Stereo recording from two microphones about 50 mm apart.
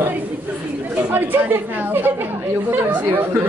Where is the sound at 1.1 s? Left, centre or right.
Right.